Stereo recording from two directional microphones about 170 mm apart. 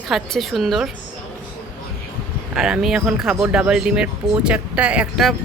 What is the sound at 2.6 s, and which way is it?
Speech, 5° right (ahead or behind).